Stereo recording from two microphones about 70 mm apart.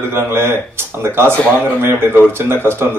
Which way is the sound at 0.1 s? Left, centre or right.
Right.